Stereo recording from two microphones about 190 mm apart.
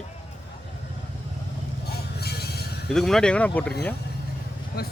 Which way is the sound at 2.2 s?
55° left (ahead or behind).